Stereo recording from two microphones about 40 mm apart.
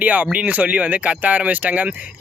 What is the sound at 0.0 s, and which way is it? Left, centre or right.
Speech, right.